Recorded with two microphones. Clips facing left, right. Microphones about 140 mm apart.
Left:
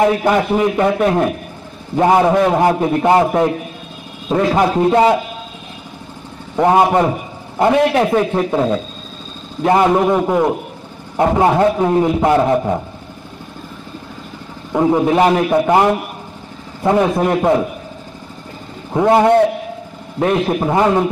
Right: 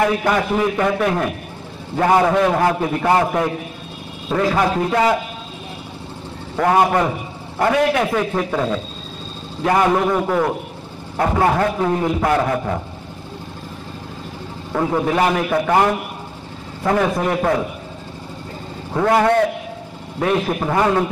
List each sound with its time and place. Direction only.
0.0 s a man's voice: 20° left (ahead or behind)
6.5 s a man's voice: 20° left (ahead or behind)
14.7 s a man's voice: 20° left (ahead or behind)
18.9 s a man's voice: 20° left (ahead or behind)